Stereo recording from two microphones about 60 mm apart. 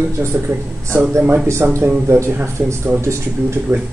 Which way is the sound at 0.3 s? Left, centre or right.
Right.